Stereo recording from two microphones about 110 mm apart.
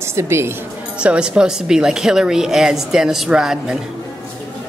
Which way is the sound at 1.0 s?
10° right (ahead or behind).